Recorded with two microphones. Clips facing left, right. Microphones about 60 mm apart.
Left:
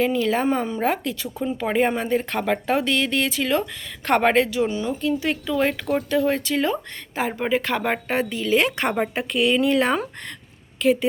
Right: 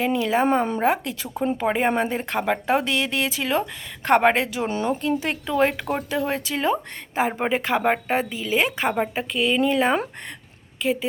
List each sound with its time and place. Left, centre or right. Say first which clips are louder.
0.0 s a woman's voice: even; centre
4.7 s a woman's voice: right 1 dB; right; by 11.0 s centre